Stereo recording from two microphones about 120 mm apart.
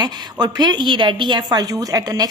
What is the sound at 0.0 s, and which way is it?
A woman's voice, 35° right (ahead or behind).